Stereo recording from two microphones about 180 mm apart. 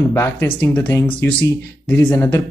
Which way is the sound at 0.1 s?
15° left (ahead or behind).